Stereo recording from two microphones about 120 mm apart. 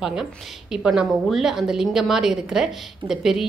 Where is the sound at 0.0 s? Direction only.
5° right (ahead or behind).